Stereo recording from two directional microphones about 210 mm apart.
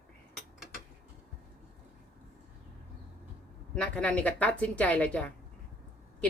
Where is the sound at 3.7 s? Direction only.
5° left (ahead or behind).